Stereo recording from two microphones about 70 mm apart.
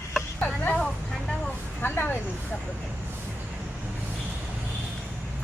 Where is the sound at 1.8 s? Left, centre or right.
Left.